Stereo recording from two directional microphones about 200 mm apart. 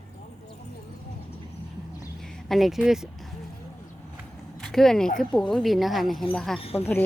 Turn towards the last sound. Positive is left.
turn(degrees=30)  # may be behind; listen again after turning